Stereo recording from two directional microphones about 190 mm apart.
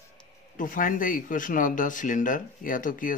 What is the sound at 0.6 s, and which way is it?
Speech, 45° left (ahead or behind).